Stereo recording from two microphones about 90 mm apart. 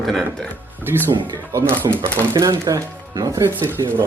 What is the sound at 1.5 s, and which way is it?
Speech, 25° right (ahead or behind).